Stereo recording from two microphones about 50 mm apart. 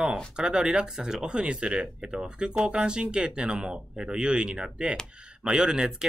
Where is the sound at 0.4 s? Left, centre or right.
Centre.